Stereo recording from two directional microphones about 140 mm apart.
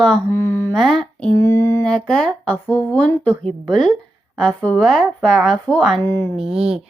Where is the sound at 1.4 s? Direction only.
20° left (ahead or behind).